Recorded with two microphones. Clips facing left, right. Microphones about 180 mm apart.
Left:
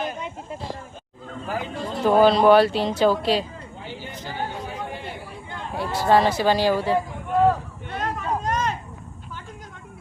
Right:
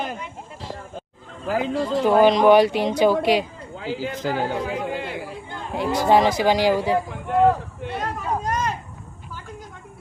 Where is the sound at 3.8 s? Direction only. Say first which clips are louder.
Right 10 dB; 90° right.